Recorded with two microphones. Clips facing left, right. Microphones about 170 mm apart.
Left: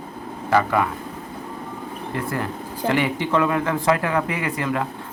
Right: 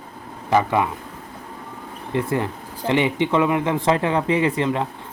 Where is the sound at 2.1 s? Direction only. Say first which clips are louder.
Right 5 dB; 25° right (ahead or behind).